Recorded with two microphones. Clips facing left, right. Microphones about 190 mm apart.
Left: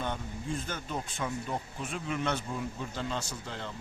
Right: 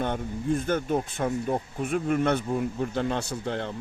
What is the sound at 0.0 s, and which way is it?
Speech, 55° right (ahead or behind).